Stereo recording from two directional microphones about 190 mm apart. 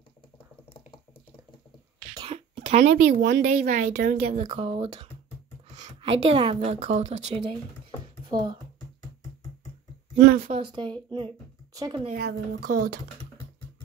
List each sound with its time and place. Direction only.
2.2 s a woman's voice: 35° right (ahead or behind)
4.5 s speech: 30° right (ahead or behind)
5.8 s a sound: 40° right (ahead or behind)
6.3 s a woman's voice: 25° right (ahead or behind)
8.3 s speech: 20° right (ahead or behind)
10.1 s speech: 55° right (ahead or behind)
10.4 s speech: 30° right (ahead or behind)
12.2 s speech: 55° right (ahead or behind)